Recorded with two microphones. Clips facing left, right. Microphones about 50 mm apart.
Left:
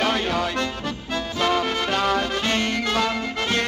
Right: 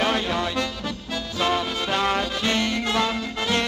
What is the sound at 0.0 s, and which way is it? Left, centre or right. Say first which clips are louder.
Music: left 1 dB; left.